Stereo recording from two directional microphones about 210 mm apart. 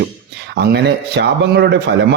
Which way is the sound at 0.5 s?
50° right (ahead or behind).